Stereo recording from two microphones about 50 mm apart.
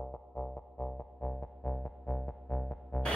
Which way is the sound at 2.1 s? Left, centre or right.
Left.